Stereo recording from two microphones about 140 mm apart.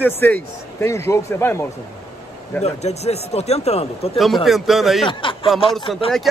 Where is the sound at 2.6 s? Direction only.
50° left (ahead or behind).